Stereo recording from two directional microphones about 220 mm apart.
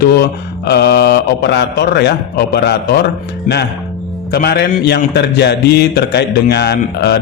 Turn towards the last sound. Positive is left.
turn(degrees=45)  # may be behind; listen again after turning